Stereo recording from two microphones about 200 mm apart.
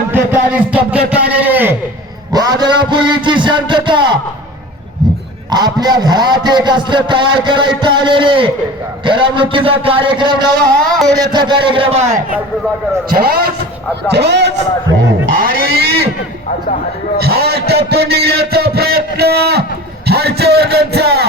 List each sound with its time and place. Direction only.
0.1 s a sound: 10° right (ahead or behind)
2.3 s a man's voice: 20° right (ahead or behind)
5.5 s a man's voice: 20° right (ahead or behind)
13.1 s a man's voice: 50° right (ahead or behind)
15.4 s a man's voice: 45° right (ahead or behind)
17.2 s a man's voice: 50° right (ahead or behind)